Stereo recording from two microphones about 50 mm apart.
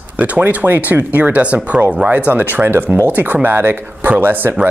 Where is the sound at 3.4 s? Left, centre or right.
Right.